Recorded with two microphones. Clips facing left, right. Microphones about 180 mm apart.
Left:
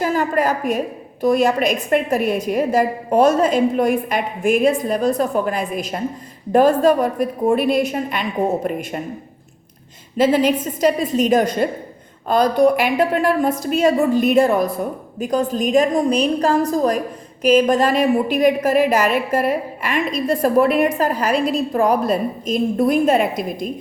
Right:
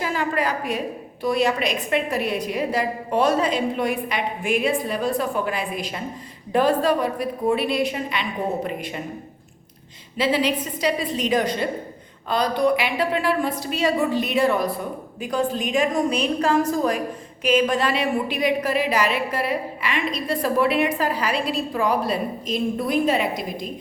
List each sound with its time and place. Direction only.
0.0 s a woman's voice: 45° left (ahead or behind)
10.2 s a woman's voice: 45° left (ahead or behind)